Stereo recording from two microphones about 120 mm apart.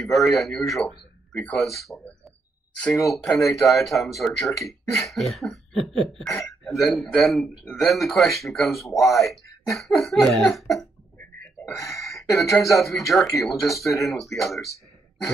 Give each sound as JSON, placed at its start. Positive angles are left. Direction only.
{"t": 0.0, "sound": "speech", "side_deg": 0}
{"t": 3.1, "sound": "speech", "side_deg": 0}
{"t": 12.0, "sound": "a sound", "side_deg": 25}
{"t": 12.5, "sound": "speech", "side_deg": 0}